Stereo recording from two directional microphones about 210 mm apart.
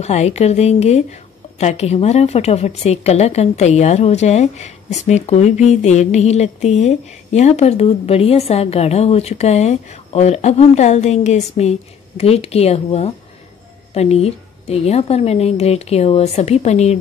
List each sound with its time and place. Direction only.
0.0 s a woman's voice: 30° left (ahead or behind)